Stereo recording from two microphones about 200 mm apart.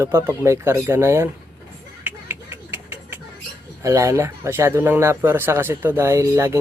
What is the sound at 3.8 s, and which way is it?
Speech, 15° right (ahead or behind).